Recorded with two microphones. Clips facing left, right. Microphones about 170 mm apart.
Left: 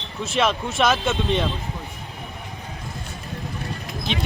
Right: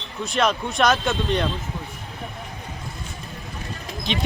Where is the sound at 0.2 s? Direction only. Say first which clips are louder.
Even; centre (ahead or behind).